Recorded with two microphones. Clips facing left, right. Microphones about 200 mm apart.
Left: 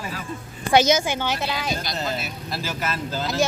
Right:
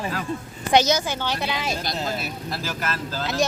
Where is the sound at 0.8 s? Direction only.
20° left (ahead or behind).